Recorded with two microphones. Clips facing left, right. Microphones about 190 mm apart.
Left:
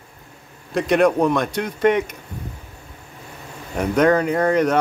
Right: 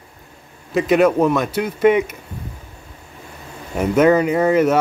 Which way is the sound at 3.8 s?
5° right (ahead or behind).